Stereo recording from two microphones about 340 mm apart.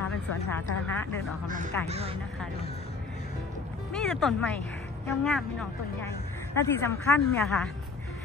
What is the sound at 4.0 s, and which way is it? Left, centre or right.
Speech, centre.